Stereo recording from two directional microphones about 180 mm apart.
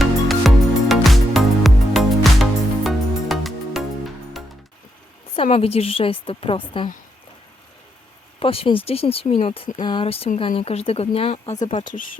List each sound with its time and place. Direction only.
0.0 s music: centre (ahead or behind)
5.4 s speech: 35° left (ahead or behind)
8.4 s speech: 30° left (ahead or behind)